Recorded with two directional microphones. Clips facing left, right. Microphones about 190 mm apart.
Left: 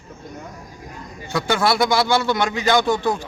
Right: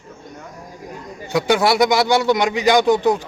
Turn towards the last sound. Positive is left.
turn(degrees=-15)  # may be behind; listen again after turning